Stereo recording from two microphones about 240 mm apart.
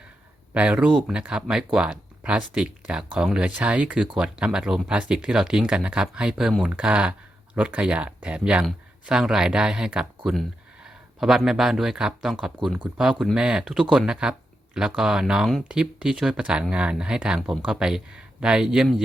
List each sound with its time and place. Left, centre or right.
0.5 s speech: centre